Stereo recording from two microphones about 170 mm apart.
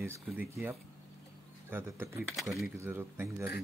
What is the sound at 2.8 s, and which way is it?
Speech, 15° right (ahead or behind).